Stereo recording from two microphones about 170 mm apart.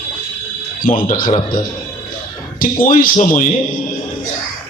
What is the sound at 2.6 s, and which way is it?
Speech, 55° left (ahead or behind).